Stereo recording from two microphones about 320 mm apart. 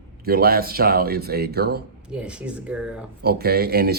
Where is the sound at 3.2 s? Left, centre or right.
Right.